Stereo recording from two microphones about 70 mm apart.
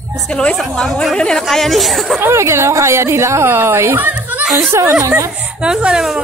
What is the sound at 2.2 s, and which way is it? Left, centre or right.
A woman's voice, right.